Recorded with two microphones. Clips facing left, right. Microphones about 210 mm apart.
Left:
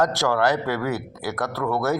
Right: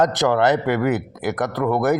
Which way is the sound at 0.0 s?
20° right (ahead or behind).